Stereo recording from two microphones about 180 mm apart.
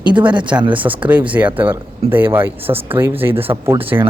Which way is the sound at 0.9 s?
10° right (ahead or behind).